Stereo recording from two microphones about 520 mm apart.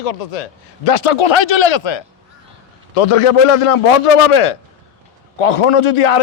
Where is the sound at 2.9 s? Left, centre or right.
Left.